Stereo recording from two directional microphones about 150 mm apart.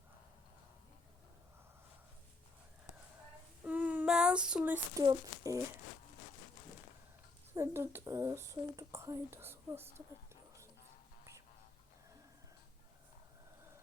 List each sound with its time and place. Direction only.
3.6 s child singing: 10° right (ahead or behind)
5.0 s speech: 25° right (ahead or behind)
7.5 s speech: 20° right (ahead or behind)